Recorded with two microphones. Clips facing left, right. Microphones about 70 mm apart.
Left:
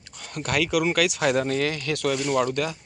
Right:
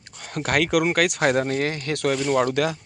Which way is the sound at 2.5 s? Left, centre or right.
Right.